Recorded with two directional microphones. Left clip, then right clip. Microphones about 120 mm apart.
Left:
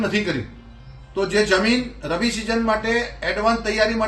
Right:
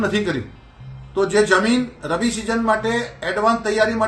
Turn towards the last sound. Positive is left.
turn(degrees=-15)  # may be behind; listen again after turning